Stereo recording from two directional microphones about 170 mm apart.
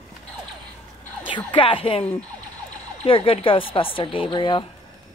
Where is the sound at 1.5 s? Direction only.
30° left (ahead or behind).